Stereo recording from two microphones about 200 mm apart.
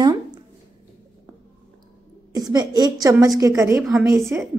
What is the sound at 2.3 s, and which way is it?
A woman's voice, 20° right (ahead or behind).